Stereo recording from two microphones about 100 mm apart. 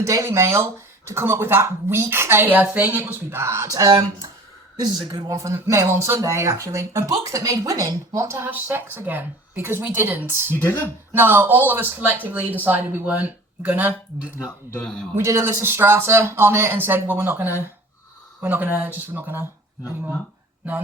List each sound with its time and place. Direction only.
0.0 s speech: 30° right (ahead or behind)
10.6 s speech: 20° left (ahead or behind)
11.2 s speech: 20° right (ahead or behind)
14.7 s speech: 10° left (ahead or behind)
15.1 s speech: 30° right (ahead or behind)